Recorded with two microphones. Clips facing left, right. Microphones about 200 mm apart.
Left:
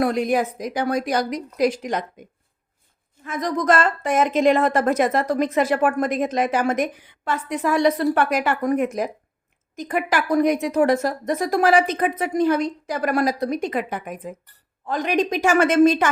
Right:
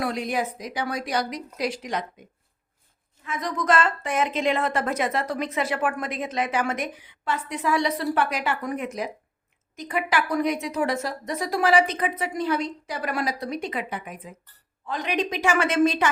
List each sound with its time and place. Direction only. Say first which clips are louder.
0.0 s a woman's voice: left 6 dB; 50° left (ahead or behind)
3.2 s a woman's voice: left 5 dB; 40° left (ahead or behind)